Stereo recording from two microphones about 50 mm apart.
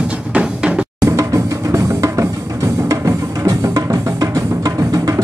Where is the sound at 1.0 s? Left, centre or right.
Right.